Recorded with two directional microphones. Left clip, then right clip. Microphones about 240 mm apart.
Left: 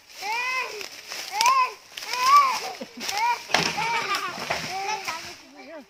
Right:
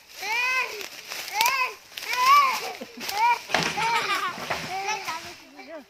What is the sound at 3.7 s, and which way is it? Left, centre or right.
Children playing, right.